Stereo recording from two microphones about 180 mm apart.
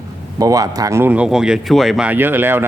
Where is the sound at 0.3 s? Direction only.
20° right (ahead or behind).